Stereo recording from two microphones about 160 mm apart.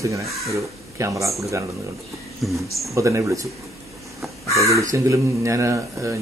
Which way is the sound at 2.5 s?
Centre (ahead or behind).